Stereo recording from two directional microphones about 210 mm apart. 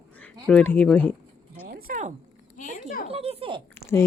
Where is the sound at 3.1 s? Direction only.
30° right (ahead or behind).